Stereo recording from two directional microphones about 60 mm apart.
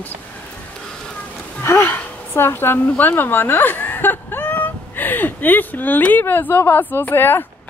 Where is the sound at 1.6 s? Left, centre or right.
Left.